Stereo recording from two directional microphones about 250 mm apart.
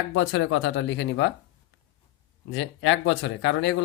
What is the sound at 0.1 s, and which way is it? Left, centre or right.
Speech, left.